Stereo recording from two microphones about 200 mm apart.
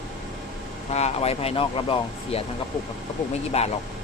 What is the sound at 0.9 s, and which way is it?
Speech, 30° left (ahead or behind).